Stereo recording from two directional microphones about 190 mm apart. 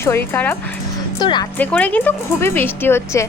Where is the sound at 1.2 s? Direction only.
25° left (ahead or behind).